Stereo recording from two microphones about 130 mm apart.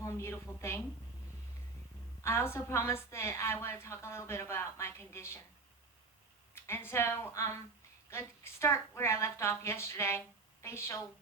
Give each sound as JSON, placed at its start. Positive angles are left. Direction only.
{"t": 0.0, "sound": "a woman's voice", "side_deg": 20}
{"t": 2.2, "sound": "a woman's voice", "side_deg": 20}
{"t": 6.5, "sound": "a woman's voice", "side_deg": 20}